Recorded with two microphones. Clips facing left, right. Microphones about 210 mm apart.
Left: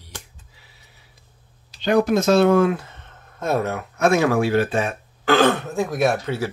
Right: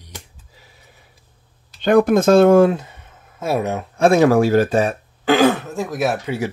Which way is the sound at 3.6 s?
25° right (ahead or behind).